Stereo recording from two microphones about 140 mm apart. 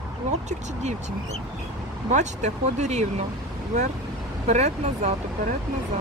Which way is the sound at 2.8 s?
55° right (ahead or behind).